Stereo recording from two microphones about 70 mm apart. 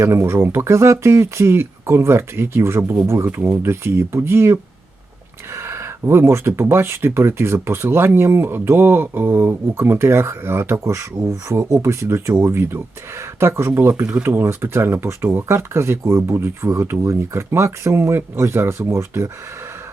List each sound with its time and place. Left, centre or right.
0.0 s speech: right
14.0 s speech: centre
14.3 s speech: right